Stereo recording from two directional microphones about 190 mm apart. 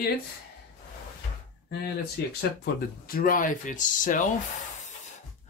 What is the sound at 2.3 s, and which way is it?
Speech, 55° left (ahead or behind).